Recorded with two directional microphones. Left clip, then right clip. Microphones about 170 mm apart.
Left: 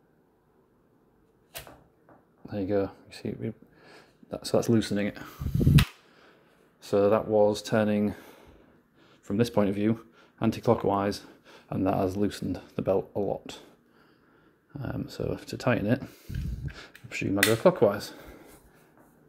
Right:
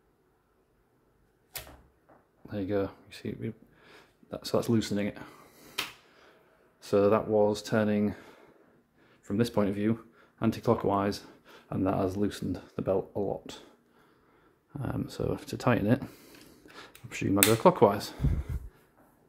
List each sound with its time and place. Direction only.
2.4 s speech: 10° left (ahead or behind)
6.8 s speech: 10° right (ahead or behind)
14.7 s speech: 15° right (ahead or behind)
16.0 s speech: 20° right (ahead or behind)